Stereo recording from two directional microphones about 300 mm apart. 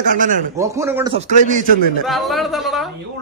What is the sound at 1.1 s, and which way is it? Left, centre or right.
Speech, right.